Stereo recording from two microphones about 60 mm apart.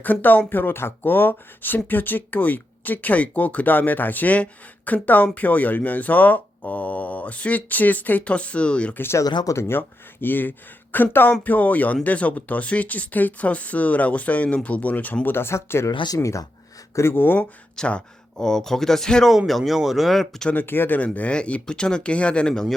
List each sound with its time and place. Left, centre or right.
0.0 s speech: left
9.1 s speech: left
9.6 s speech: left
16.0 s speech: left
16.9 s speech: left
17.2 s speech: left
17.7 s speech: centre
20.5 s speech: left
21.0 s speech: left